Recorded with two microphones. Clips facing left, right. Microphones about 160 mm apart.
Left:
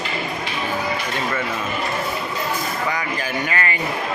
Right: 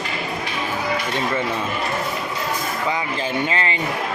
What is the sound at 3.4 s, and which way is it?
Speech, 25° right (ahead or behind).